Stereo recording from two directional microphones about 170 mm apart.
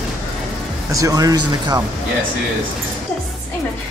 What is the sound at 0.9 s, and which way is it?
Speech, 20° right (ahead or behind).